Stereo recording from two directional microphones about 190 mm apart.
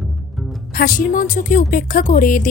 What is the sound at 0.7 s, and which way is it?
A woman's voice, 45° left (ahead or behind).